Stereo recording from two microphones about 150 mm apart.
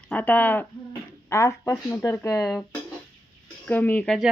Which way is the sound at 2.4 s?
Centre (ahead or behind).